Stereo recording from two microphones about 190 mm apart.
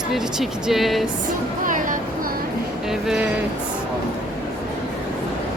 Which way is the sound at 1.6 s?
45° right (ahead or behind).